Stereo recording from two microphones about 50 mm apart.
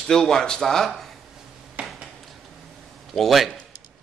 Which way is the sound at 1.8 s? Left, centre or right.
Right.